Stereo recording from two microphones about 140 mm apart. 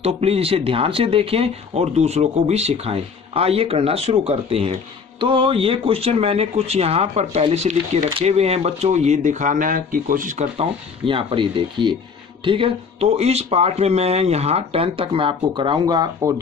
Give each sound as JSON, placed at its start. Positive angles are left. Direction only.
{"t": 0.0, "sound": "speech", "side_deg": -45}
{"t": 11.1, "sound": "speech", "side_deg": -40}